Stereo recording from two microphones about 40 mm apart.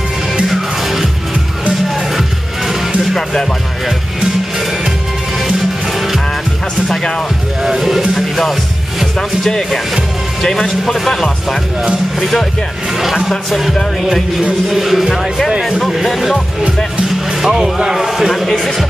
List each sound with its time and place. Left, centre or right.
0.5 s music: centre
5.9 s music: centre
7.6 s speech: centre
8.1 s music: centre
10.4 s speech: centre
12.9 s speech: centre
17.4 s speech: centre